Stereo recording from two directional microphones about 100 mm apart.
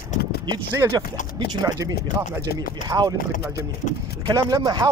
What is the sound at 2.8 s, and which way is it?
Speech, 40° right (ahead or behind).